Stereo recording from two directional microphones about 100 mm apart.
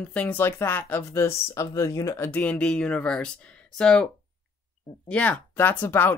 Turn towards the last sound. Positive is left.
turn(degrees=20)  # may be behind; listen again after turning